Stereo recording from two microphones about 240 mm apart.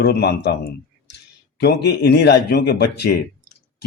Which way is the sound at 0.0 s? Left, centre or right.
Left.